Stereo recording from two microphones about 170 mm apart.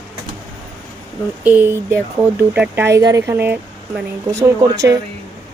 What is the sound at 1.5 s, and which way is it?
Speech, 10° right (ahead or behind).